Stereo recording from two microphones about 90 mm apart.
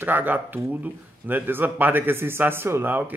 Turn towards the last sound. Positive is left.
turn(degrees=-25)  # may be behind; listen again after turning